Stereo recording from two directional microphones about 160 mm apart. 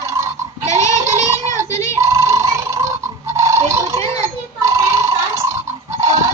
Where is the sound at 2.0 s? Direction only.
20° right (ahead or behind).